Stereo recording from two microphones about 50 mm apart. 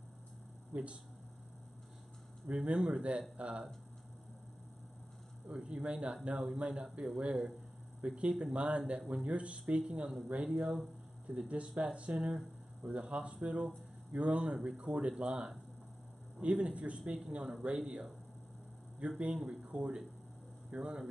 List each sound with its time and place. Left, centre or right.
0.7 s speech: right
2.4 s speech: right
5.5 s speech: right
10.5 s speech: centre
11.4 s speech: right
19.5 s speech: centre